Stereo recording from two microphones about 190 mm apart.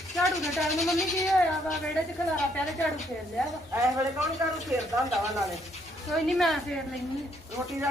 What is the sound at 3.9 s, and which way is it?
Speech, 15° right (ahead or behind).